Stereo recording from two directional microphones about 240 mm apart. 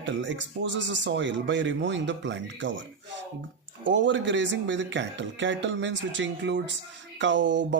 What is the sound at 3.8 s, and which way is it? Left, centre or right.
Speech, right.